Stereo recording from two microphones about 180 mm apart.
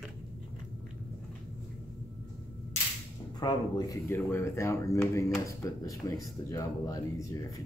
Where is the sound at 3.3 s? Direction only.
20° left (ahead or behind).